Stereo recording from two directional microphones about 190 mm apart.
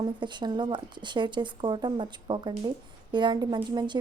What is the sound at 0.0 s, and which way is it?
Speech, 25° right (ahead or behind).